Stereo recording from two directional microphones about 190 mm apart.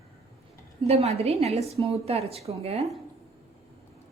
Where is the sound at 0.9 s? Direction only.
35° right (ahead or behind).